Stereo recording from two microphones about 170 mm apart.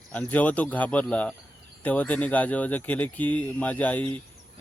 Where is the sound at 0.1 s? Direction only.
10° left (ahead or behind).